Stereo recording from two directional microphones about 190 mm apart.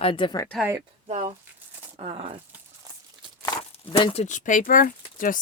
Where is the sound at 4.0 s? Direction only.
35° left (ahead or behind).